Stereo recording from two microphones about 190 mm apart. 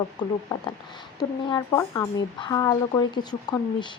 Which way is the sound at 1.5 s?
20° left (ahead or behind).